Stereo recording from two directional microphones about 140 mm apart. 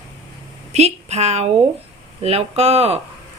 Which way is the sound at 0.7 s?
50° right (ahead or behind).